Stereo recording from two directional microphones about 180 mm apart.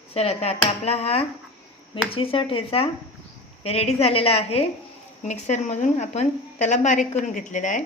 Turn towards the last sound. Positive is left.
turn(degrees=45)  # may be behind; listen again after turning